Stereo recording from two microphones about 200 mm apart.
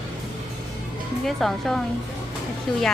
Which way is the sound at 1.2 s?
Centre (ahead or behind).